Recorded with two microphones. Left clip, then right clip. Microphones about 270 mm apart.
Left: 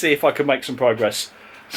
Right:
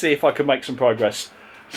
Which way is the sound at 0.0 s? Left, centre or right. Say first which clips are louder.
Left 1 dB; centre.